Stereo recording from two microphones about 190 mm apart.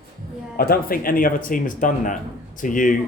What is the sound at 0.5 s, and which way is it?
Speech, 50° left (ahead or behind).